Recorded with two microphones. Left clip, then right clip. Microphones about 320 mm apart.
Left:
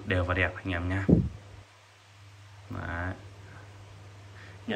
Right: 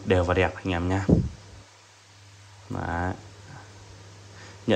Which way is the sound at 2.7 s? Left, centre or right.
Centre.